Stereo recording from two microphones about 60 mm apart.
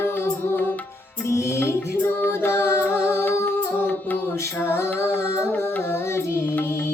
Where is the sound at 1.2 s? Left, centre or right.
Left.